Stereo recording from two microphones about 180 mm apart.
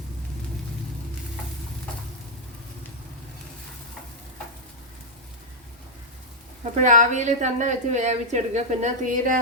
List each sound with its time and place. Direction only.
6.7 s a woman's voice: 45° right (ahead or behind)